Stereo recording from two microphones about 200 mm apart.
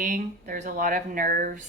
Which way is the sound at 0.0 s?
40° right (ahead or behind).